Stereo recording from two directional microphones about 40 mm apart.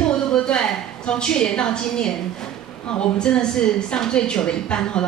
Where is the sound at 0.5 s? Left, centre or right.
Left.